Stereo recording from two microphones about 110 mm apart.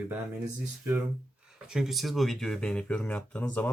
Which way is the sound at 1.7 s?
5° right (ahead or behind).